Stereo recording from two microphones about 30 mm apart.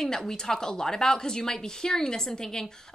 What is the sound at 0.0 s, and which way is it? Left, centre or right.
A woman's voice, centre.